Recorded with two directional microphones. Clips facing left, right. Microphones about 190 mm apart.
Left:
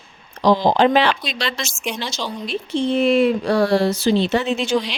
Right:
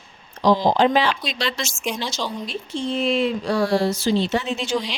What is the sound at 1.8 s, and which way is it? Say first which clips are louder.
Speech: even; 5° right (ahead or behind).